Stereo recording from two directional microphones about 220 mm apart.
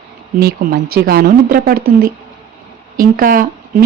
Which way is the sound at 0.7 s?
45° right (ahead or behind).